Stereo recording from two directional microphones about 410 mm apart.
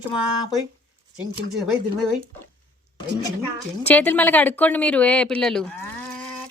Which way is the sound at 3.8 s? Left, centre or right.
Centre.